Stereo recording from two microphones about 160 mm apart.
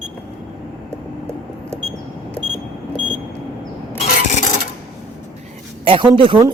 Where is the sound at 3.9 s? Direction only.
50° left (ahead or behind).